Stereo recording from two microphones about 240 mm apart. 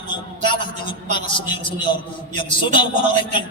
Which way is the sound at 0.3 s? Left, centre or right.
Centre.